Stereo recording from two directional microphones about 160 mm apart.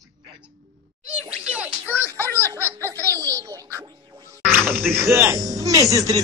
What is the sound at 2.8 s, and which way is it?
Music, 15° right (ahead or behind).